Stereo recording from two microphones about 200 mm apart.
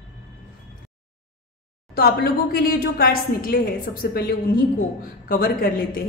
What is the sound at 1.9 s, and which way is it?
A woman's voice, 50° left (ahead or behind).